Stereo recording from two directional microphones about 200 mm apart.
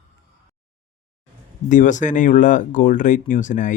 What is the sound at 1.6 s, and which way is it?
Speech, 40° left (ahead or behind).